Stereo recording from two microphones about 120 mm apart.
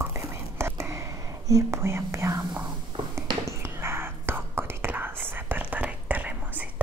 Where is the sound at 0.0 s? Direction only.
20° right (ahead or behind).